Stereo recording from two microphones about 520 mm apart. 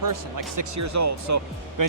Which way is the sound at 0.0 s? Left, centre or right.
Right.